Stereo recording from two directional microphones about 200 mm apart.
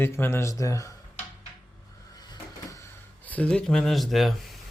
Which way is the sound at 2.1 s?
20° left (ahead or behind).